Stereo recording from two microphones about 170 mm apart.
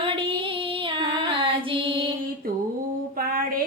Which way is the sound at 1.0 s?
30° right (ahead or behind).